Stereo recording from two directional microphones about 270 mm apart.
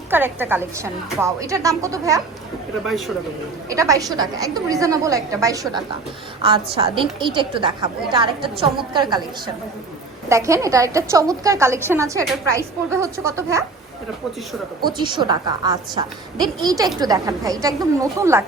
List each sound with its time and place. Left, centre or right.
0.1 s a woman's voice: centre
3.7 s a woman's voice: centre
10.2 s a woman's voice: centre
12.2 s a woman's voice: centre
14.8 s a woman's voice: centre